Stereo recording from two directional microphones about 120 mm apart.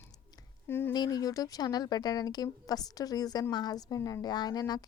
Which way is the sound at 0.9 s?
35° left (ahead or behind).